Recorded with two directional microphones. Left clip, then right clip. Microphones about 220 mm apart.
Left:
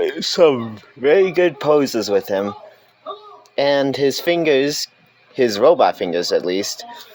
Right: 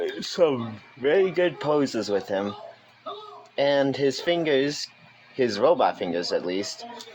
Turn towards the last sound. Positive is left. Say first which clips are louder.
# left 8 dB
turn(degrees=40)  # may be behind; listen again after turning